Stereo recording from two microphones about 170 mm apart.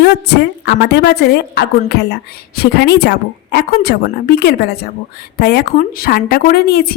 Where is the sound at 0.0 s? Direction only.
70° left (ahead or behind).